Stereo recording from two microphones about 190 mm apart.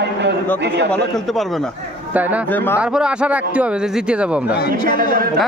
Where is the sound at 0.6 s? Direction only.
65° right (ahead or behind).